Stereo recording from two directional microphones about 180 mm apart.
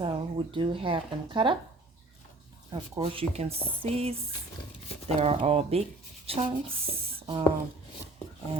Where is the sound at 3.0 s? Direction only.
35° right (ahead or behind).